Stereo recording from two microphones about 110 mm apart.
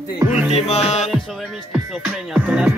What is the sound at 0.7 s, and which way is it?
Music, 80° left.